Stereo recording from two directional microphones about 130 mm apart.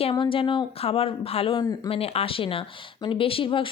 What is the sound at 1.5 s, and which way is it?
Speech, 30° left (ahead or behind).